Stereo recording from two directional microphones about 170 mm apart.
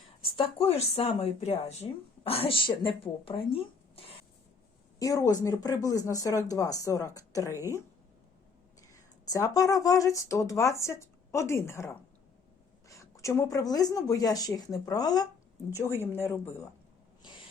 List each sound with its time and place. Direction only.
0.2 s speech: 35° left (ahead or behind)
4.9 s a woman's voice: 20° left (ahead or behind)
8.9 s a woman's voice: 20° left (ahead or behind)
17.2 s a sound: 25° left (ahead or behind)